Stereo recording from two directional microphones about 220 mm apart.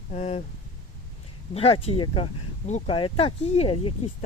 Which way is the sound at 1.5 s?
25° left (ahead or behind).